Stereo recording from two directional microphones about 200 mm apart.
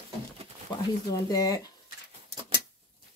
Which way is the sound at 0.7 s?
20° left (ahead or behind).